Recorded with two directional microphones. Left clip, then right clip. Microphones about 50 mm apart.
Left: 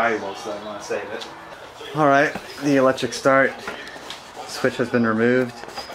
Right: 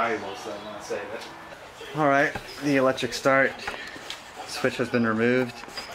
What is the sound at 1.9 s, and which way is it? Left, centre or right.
Speech, left.